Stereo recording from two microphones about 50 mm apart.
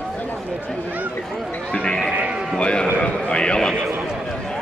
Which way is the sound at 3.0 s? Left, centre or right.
Centre.